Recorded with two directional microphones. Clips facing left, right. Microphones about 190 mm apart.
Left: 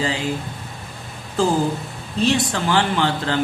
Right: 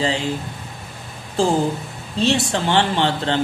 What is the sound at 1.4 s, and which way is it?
A man's voice, 30° right (ahead or behind).